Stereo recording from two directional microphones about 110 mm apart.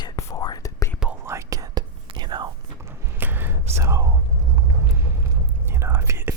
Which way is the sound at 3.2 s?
20° right (ahead or behind).